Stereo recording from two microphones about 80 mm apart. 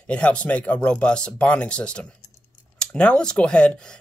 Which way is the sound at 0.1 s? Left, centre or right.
Centre.